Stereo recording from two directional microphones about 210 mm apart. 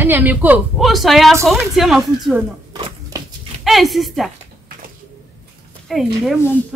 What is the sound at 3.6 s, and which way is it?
Speech, centre (ahead or behind).